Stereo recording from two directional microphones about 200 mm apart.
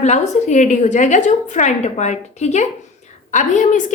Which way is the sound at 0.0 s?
35° left (ahead or behind).